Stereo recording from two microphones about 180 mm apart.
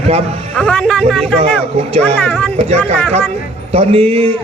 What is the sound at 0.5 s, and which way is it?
Speech, 5° left (ahead or behind).